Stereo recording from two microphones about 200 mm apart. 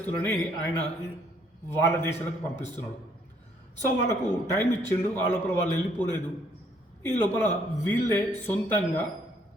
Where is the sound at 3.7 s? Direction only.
10° left (ahead or behind).